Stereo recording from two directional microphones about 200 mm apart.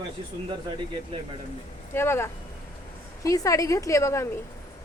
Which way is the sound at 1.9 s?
10° left (ahead or behind).